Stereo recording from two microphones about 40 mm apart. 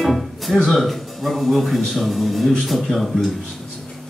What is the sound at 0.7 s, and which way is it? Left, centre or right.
A man's voice, centre.